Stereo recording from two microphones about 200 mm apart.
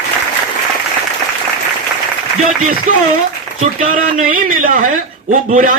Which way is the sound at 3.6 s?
40° right (ahead or behind).